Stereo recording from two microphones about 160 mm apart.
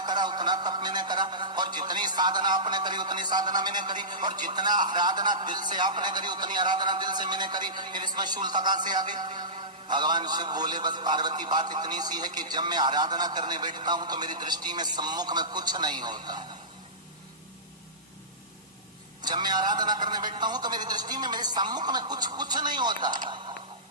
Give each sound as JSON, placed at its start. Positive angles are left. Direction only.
{"t": 0.0, "sound": "a man's voice", "side_deg": -25}
{"t": 19.2, "sound": "a man's voice", "side_deg": -25}